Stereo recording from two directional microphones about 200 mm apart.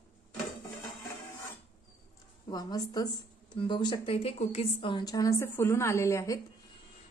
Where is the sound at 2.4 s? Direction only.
20° left (ahead or behind).